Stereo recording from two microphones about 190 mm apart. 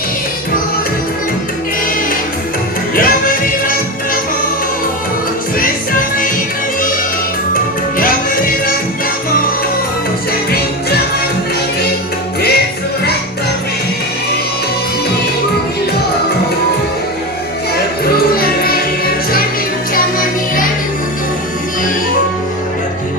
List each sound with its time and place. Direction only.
2.9 s music: 50° left (ahead or behind)
5.5 s music: 45° left (ahead or behind)
7.5 s music: 50° left (ahead or behind)
18.0 s music: 50° left (ahead or behind)
19.9 s music: 45° left (ahead or behind)